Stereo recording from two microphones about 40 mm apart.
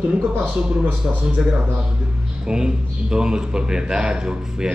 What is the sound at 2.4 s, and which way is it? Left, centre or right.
A man's voice, centre.